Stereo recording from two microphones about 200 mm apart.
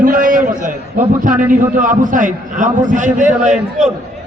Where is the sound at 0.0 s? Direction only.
40° right (ahead or behind).